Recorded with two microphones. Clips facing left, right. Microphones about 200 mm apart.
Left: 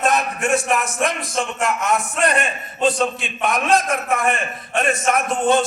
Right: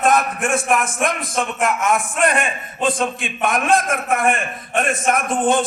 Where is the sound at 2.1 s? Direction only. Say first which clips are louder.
Right 1 dB; 50° right (ahead or behind).